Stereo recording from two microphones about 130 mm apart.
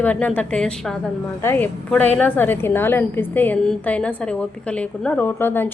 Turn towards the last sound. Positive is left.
turn(degrees=15)  # may be behind; listen again after turning